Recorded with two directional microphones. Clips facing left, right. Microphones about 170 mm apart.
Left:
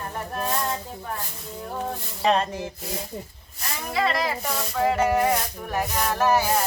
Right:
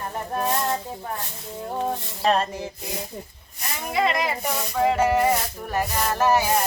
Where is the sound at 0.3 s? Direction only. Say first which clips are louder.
Right 3 dB; 25° right (ahead or behind).